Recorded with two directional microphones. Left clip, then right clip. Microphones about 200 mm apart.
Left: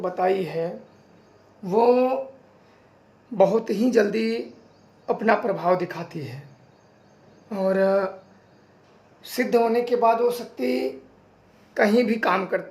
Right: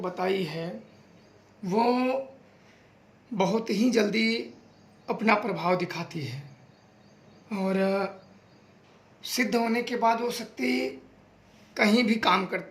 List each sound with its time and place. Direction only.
0.0 s speech: 30° right (ahead or behind)
3.3 s speech: 25° right (ahead or behind)
7.5 s speech: 25° right (ahead or behind)
9.3 s speech: 35° right (ahead or behind)